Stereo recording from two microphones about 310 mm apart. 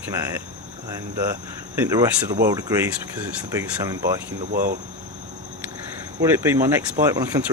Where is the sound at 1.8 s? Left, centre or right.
Centre.